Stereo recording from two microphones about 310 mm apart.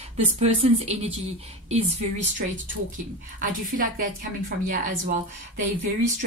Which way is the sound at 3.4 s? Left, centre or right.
Right.